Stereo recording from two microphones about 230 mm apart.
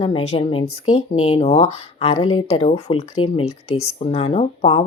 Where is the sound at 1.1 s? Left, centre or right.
Left.